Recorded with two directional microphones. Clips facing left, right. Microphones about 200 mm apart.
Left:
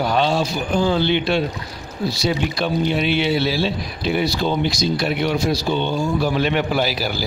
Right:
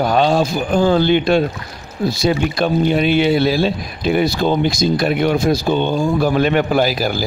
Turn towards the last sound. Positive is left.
turn(degrees=-50)  # may be behind; listen again after turning